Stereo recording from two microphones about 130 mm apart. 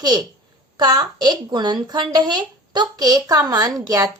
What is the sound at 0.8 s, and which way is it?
Speech, 35° right (ahead or behind).